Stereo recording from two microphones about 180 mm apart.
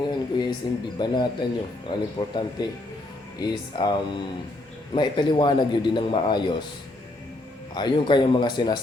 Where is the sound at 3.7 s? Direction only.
25° left (ahead or behind).